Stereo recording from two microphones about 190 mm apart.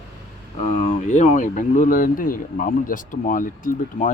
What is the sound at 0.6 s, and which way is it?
Speech, 35° left (ahead or behind).